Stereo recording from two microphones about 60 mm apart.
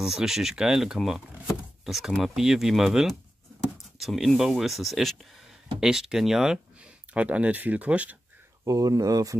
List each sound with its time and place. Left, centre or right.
0.0 s speech: centre
7.2 s speech: right
8.6 s speech: right